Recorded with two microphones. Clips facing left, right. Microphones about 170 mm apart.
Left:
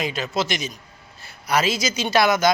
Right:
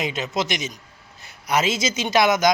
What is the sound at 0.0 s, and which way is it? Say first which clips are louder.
A man's voice: even; 20° right (ahead or behind).